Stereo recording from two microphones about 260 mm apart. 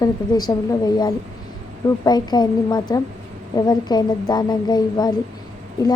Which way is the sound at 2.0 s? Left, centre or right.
Centre.